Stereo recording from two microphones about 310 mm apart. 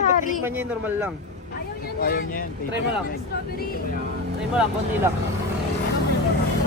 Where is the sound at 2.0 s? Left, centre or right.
Left.